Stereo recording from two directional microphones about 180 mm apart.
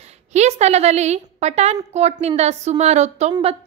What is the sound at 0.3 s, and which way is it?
A woman's voice, 40° right (ahead or behind).